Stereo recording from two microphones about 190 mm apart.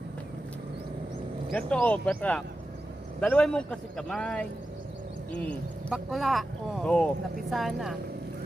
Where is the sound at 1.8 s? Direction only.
5° left (ahead or behind).